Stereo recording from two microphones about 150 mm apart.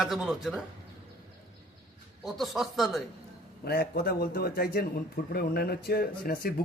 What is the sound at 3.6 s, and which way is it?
Speech, 90° left.